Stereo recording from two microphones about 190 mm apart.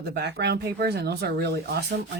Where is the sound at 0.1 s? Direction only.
60° right (ahead or behind).